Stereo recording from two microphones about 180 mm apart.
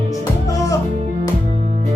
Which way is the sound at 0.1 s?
20° left (ahead or behind).